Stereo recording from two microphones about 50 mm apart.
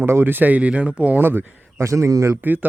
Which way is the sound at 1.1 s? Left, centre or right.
Right.